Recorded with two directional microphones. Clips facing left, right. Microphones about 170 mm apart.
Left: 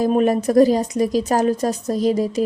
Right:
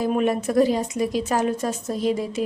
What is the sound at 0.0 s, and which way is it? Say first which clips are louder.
A woman's voice: left 5 dB; 40° left (ahead or behind).